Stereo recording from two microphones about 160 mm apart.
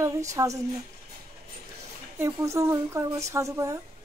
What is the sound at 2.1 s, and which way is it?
Speech, 15° right (ahead or behind).